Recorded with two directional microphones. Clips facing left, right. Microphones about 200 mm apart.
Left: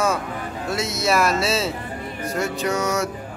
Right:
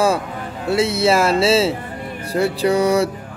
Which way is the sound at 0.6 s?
30° right (ahead or behind).